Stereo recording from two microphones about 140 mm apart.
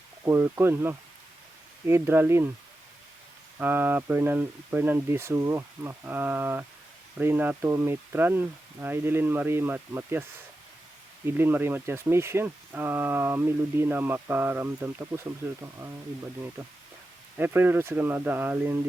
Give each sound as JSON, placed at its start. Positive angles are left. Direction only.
{"t": 0.3, "sound": "speech", "side_deg": -15}
{"t": 3.6, "sound": "speech", "side_deg": -15}
{"t": 11.3, "sound": "speech", "side_deg": -15}
{"t": 17.3, "sound": "speech", "side_deg": -15}